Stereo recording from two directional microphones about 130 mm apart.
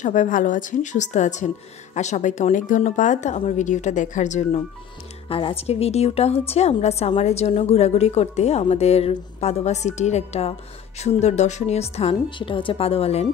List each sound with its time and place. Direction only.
0.0 s a woman's voice: 75° left (ahead or behind)
5.3 s a woman's voice: 45° left (ahead or behind)
12.4 s a woman's voice: 40° left (ahead or behind)